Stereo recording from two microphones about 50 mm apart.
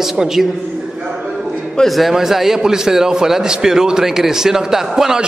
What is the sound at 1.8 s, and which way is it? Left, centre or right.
A man's voice, centre.